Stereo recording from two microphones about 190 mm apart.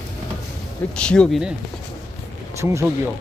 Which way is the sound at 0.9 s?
5° left (ahead or behind).